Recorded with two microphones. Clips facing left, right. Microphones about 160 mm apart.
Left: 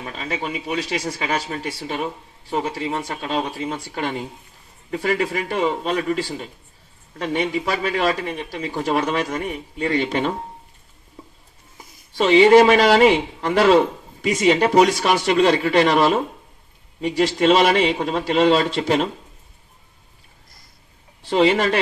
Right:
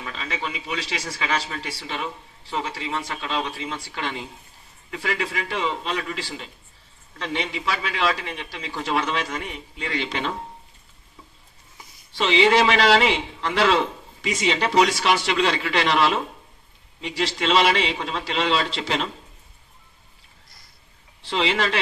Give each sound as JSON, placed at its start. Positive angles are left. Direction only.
{"t": 0.0, "sound": "speech", "side_deg": 45}
{"t": 12.1, "sound": "speech", "side_deg": 45}
{"t": 21.2, "sound": "speech", "side_deg": 45}